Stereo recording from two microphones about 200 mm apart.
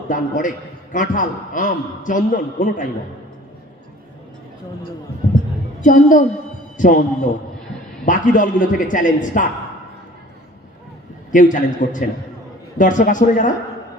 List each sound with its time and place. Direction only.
0.1 s a man's voice: 40° left (ahead or behind)
5.8 s a man's voice: 40° left (ahead or behind)
8.0 s a man's voice: 40° left (ahead or behind)
11.3 s a man's voice: 40° left (ahead or behind)